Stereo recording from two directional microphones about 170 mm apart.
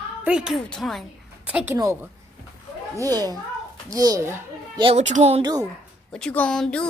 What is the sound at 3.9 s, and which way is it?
Speech, 20° right (ahead or behind).